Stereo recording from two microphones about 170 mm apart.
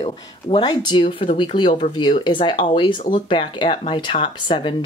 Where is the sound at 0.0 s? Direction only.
30° left (ahead or behind).